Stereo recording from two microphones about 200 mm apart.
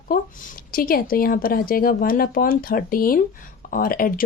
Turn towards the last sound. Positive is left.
turn(degrees=45)  # may be behind; listen again after turning